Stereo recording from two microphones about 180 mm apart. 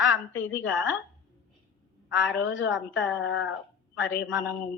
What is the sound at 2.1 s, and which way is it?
A woman's voice, 90° left.